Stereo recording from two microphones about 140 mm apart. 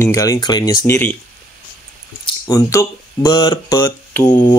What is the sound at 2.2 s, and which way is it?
Speech, 25° left (ahead or behind).